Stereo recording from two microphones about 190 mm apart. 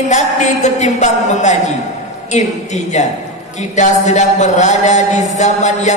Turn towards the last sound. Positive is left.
turn(degrees=40)  # may be behind; listen again after turning